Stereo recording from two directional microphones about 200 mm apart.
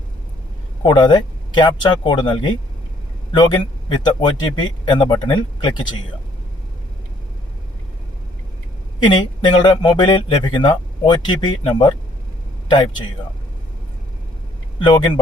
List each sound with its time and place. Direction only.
0.8 s speech: 20° left (ahead or behind)
9.0 s speech: 25° left (ahead or behind)
14.8 s speech: 25° left (ahead or behind)